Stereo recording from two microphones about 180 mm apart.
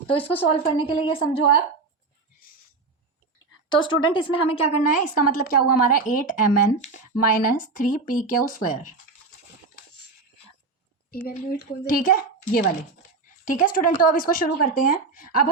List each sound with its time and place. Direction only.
0.1 s a woman's voice: 30° left (ahead or behind)
3.7 s a woman's voice: 25° left (ahead or behind); by 9.0 s 50° left (ahead or behind)
11.3 s a woman's voice: 45° left (ahead or behind)